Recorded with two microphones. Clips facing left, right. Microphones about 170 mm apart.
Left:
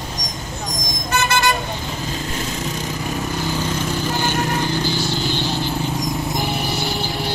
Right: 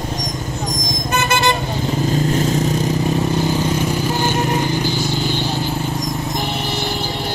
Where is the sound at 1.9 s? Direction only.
45° right (ahead or behind).